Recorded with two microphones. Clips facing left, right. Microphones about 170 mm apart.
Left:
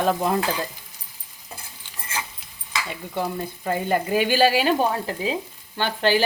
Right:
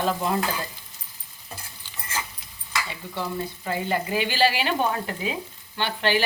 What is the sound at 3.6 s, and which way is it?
Speech, 45° left (ahead or behind).